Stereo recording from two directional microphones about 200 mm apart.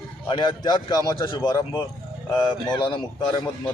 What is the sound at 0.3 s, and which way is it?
A man's voice, 25° left (ahead or behind).